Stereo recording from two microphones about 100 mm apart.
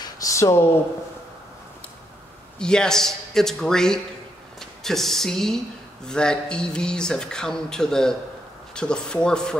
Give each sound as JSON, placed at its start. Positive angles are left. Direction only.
{"t": 0.0, "sound": "speech", "side_deg": 35}
{"t": 2.6, "sound": "speech", "side_deg": 5}